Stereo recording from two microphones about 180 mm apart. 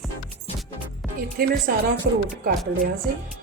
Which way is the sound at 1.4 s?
55° right (ahead or behind).